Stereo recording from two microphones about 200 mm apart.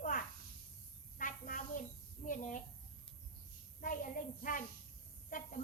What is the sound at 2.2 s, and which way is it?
Speech, 40° left (ahead or behind).